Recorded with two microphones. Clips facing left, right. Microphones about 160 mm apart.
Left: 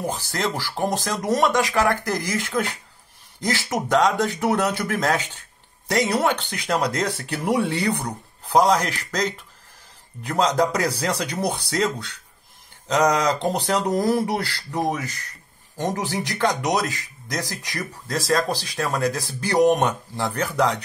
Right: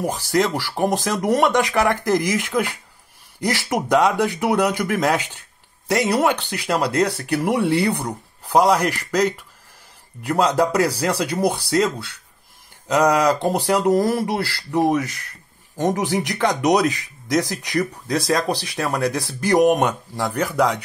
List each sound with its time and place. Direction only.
0.0 s speech: 10° right (ahead or behind)